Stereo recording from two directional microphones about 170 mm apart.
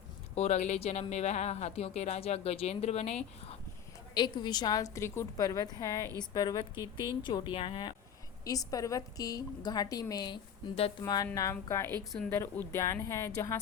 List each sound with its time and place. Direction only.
0.3 s speech: 40° left (ahead or behind)
4.1 s a woman's voice: 25° left (ahead or behind)
8.4 s a woman's voice: 20° left (ahead or behind)